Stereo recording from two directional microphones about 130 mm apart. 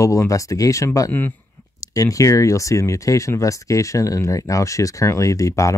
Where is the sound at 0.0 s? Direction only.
25° left (ahead or behind).